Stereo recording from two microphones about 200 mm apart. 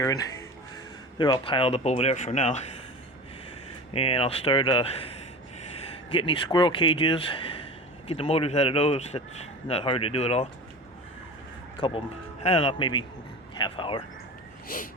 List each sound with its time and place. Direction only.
0.0 s speech: 20° left (ahead or behind); by 2.7 s 35° left (ahead or behind)
3.9 s speech: 30° left (ahead or behind)
11.8 s speech: 30° left (ahead or behind)
14.7 s a sound: 45° left (ahead or behind)